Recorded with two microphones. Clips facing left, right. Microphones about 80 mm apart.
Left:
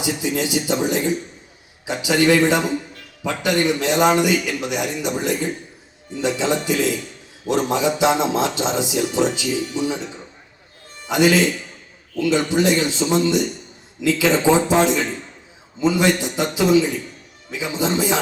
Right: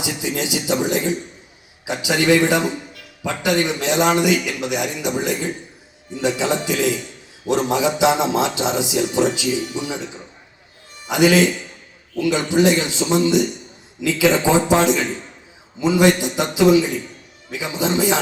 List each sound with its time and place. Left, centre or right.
0.0 s speech: right